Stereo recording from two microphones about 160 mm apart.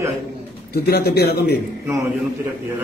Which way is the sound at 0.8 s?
75° left (ahead or behind).